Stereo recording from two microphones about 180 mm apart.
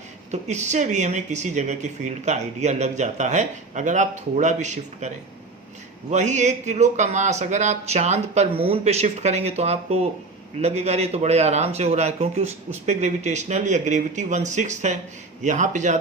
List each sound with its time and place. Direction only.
0.3 s speech: 40° right (ahead or behind)